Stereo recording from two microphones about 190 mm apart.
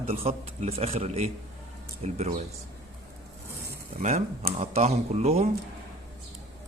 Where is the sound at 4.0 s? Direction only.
35° right (ahead or behind).